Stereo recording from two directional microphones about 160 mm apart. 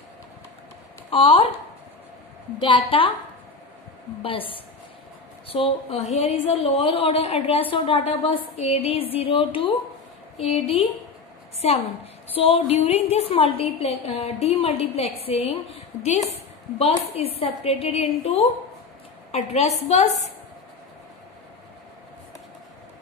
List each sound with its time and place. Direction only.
1.1 s a woman's voice: 35° left (ahead or behind)
2.6 s a woman's voice: 30° left (ahead or behind)
4.2 s a woman's voice: 35° left (ahead or behind)